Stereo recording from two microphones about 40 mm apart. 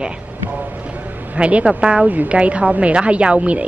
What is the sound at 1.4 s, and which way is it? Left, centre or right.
Speech, right.